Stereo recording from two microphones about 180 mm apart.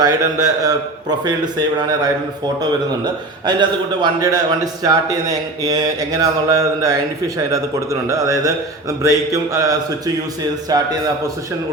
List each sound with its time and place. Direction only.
0.0 s a man's voice: 20° right (ahead or behind)
3.4 s a man's voice: 25° right (ahead or behind)
8.0 s mantra: 20° right (ahead or behind)